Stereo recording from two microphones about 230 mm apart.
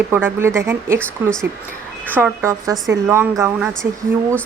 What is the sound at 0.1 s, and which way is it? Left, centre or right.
A woman's voice, centre.